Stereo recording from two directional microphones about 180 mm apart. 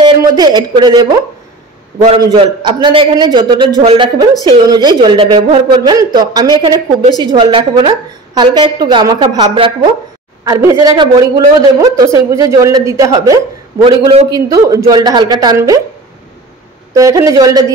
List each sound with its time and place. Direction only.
0.0 s a woman's voice: 25° right (ahead or behind)
16.9 s a woman's voice: 20° right (ahead or behind)